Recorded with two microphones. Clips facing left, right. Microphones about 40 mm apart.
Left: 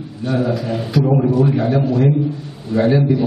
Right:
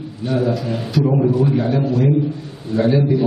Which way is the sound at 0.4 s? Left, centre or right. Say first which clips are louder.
Even; centre.